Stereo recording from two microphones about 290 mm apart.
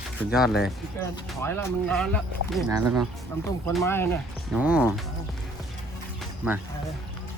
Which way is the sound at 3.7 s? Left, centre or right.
Centre.